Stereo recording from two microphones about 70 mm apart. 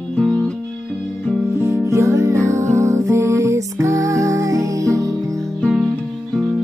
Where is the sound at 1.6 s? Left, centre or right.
Right.